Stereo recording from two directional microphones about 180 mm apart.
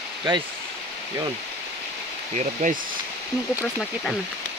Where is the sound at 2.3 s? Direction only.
45° right (ahead or behind).